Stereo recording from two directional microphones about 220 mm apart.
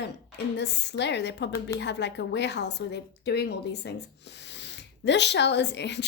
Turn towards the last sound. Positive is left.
turn(degrees=50)  # may be behind; listen again after turning